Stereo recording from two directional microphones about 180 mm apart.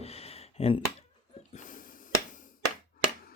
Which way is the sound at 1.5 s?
45° left (ahead or behind).